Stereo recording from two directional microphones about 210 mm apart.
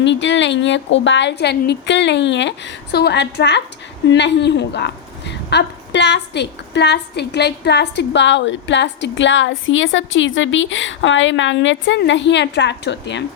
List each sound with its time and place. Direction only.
0.0 s a woman's voice: 60° left (ahead or behind)